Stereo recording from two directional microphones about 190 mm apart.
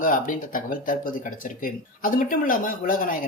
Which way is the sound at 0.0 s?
45° left (ahead or behind).